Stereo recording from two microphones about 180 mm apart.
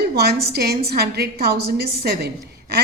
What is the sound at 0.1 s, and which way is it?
A woman's voice, 65° right (ahead or behind).